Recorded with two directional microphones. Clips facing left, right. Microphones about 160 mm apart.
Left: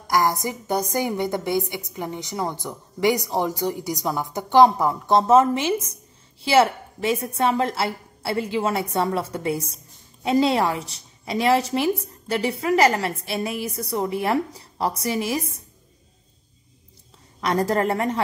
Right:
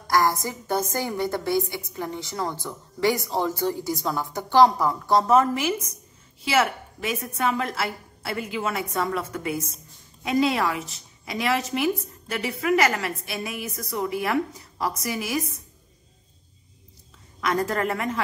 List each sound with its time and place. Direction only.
0.0 s a woman's voice: 20° left (ahead or behind)
17.4 s a woman's voice: 30° left (ahead or behind)